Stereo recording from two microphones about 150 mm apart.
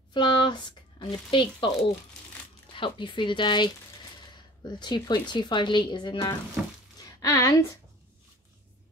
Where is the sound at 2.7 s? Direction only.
35° left (ahead or behind).